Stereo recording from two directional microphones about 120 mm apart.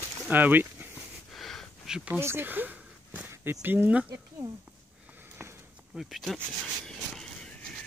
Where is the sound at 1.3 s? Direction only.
5° left (ahead or behind).